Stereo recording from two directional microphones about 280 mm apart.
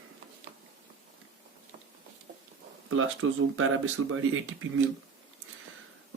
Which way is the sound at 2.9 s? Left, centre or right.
Right.